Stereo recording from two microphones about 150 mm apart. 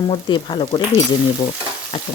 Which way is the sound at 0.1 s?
30° left (ahead or behind).